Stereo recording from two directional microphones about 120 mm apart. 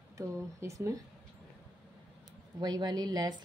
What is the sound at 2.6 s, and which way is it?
Speech, 35° right (ahead or behind).